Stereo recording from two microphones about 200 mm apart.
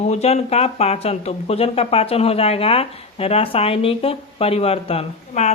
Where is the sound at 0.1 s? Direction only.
35° left (ahead or behind).